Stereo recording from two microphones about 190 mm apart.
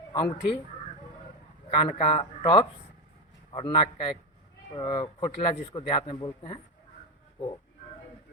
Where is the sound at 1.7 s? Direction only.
25° left (ahead or behind).